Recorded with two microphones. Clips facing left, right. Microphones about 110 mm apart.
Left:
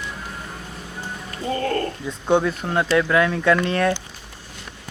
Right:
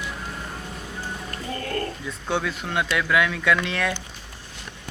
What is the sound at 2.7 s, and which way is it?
Speech, 35° left (ahead or behind).